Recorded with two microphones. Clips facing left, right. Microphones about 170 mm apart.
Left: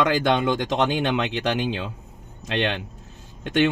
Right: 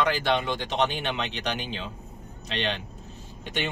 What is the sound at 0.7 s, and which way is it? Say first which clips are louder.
Speech: left 5 dB; 85° left.